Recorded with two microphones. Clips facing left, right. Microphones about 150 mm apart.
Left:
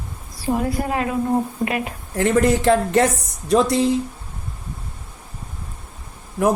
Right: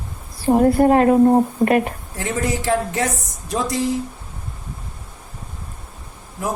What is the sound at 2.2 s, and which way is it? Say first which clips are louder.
Speech: left 7 dB; 65° left (ahead or behind).